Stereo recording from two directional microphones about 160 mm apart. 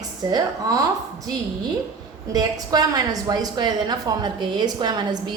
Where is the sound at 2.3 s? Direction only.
25° right (ahead or behind).